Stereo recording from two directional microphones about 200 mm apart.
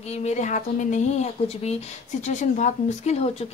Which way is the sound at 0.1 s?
35° left (ahead or behind).